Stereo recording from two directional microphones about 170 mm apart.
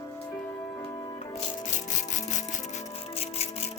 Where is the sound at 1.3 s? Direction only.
45° left (ahead or behind).